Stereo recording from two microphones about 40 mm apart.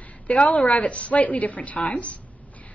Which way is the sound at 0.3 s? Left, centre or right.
Left.